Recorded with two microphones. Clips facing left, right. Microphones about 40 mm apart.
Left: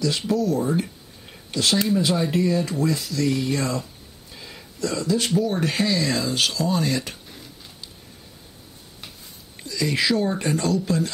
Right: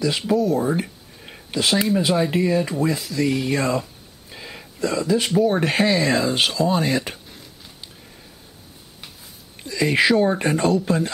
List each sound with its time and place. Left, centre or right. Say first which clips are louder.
0.3 s speech: right 3 dB; centre
4.3 s a sound: right 4 dB; right
5.5 s speech: right 4 dB; right
9.7 s speech: right 5 dB; right